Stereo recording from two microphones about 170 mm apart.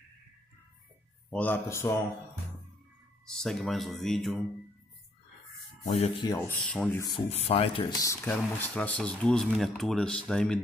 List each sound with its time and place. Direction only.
1.3 s speech: 10° left (ahead or behind)
3.3 s speech: centre (ahead or behind)
5.9 s speech: 40° left (ahead or behind)
6.2 s speech: 15° left (ahead or behind)
7.1 s speech: 35° left (ahead or behind)
8.0 s speech: 15° left (ahead or behind)